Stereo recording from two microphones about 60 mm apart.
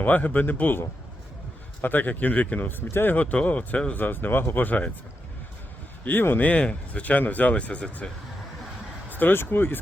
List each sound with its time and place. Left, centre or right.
0.0 s speech: left
2.6 s speech: left
3.2 s speech: left
6.1 s speech: left
9.0 s speech: left